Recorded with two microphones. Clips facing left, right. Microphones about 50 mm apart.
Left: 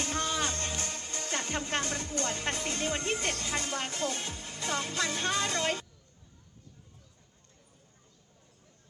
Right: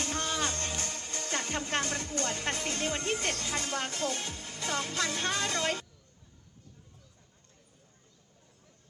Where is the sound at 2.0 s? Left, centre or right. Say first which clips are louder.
Even; left.